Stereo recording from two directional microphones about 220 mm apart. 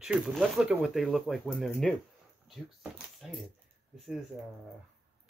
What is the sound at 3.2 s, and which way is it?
Speech, centre (ahead or behind).